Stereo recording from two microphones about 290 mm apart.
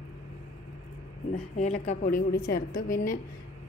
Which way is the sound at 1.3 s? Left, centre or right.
Left.